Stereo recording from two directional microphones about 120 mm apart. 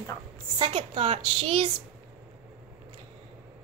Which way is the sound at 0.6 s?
50° right (ahead or behind).